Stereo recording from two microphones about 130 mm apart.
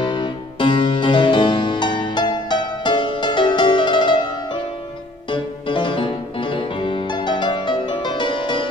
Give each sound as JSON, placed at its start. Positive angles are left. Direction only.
{"t": 0.0, "sound": "music", "side_deg": 40}